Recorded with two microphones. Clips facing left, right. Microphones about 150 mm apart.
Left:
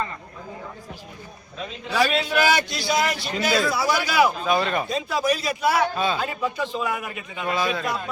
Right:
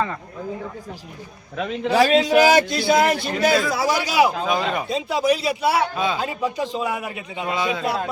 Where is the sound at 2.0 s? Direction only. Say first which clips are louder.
Right 6 dB; 40° right (ahead or behind).